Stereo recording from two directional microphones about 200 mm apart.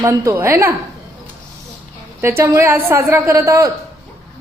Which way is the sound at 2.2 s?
15° right (ahead or behind).